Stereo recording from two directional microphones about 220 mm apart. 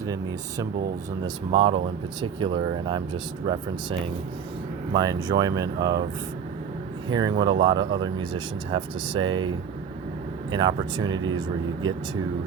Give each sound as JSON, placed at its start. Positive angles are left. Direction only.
{"t": 0.1, "sound": "speech", "side_deg": -15}
{"t": 4.9, "sound": "speech", "side_deg": -15}
{"t": 7.1, "sound": "speech", "side_deg": -20}
{"t": 10.5, "sound": "speech", "side_deg": -20}